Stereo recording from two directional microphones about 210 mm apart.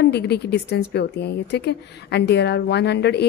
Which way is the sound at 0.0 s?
50° left (ahead or behind).